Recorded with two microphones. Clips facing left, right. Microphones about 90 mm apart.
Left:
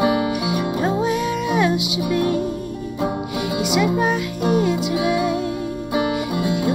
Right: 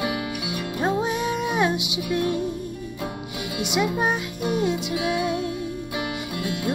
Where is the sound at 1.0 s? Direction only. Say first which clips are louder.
Left 4 dB; 25° right (ahead or behind).